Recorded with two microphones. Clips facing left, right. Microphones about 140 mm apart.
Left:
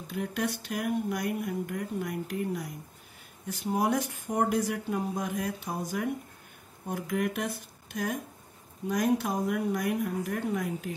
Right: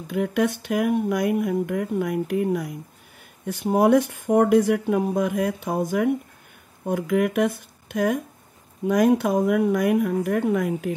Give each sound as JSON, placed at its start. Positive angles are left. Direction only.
{"t": 0.1, "sound": "speech", "side_deg": -65}
{"t": 1.4, "sound": "speech", "side_deg": -85}